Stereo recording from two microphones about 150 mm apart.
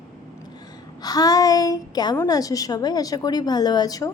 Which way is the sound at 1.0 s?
25° left (ahead or behind).